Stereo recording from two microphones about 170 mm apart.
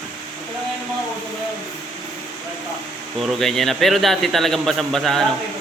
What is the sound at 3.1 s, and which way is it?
A man's voice, centre (ahead or behind).